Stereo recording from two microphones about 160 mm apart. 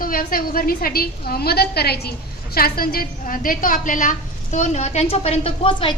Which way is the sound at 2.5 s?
70° left (ahead or behind).